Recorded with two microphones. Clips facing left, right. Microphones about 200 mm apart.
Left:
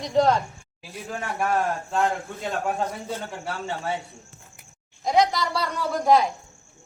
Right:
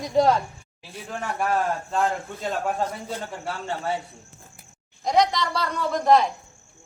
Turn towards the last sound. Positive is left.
turn(degrees=5)  # may be behind; listen again after turning